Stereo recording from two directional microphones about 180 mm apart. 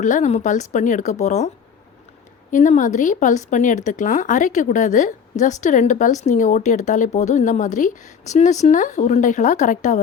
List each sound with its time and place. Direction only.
0.0 s a woman's voice: 40° left (ahead or behind)
2.5 s speech: 45° left (ahead or behind)